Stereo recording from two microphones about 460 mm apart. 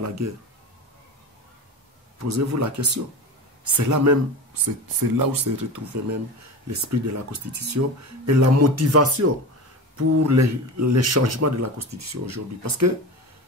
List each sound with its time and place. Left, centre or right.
2.2 s speech: right